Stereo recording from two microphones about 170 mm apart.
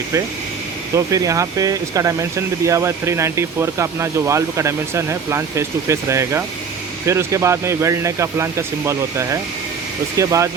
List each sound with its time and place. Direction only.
0.9 s speech: 20° right (ahead or behind)